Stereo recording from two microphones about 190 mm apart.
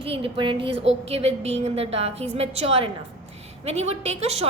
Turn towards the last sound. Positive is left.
turn(degrees=-35)  # may be behind; listen again after turning